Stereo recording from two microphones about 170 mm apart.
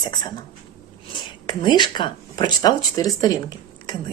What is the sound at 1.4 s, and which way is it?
Speech, 25° left (ahead or behind).